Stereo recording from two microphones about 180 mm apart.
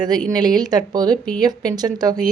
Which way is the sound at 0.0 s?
20° right (ahead or behind).